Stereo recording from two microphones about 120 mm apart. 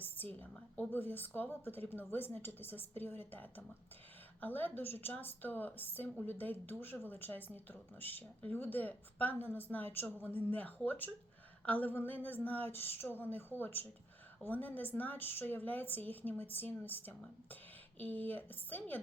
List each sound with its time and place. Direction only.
0.0 s speech: 15° left (ahead or behind)